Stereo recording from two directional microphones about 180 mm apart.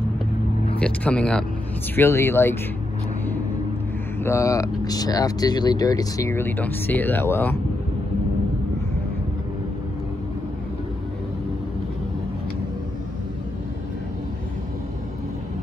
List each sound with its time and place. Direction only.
0.7 s speech: 5° left (ahead or behind)
4.2 s speech: 15° left (ahead or behind)